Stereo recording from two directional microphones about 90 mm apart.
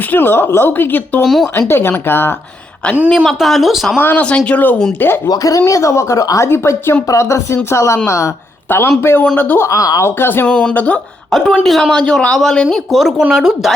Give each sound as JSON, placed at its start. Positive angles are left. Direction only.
{"t": 0.1, "sound": "speech", "side_deg": 25}
{"t": 1.2, "sound": "speech", "side_deg": 0}
{"t": 1.5, "sound": "speech", "side_deg": 25}
{"t": 3.2, "sound": "speech", "side_deg": 0}
{"t": 3.9, "sound": "speech", "side_deg": 20}
{"t": 5.3, "sound": "speech", "side_deg": 40}
{"t": 9.6, "sound": "speech", "side_deg": 40}
{"t": 10.2, "sound": "speech", "side_deg": 25}
{"t": 10.5, "sound": "speech", "side_deg": 10}
{"t": 11.3, "sound": "speech", "side_deg": 0}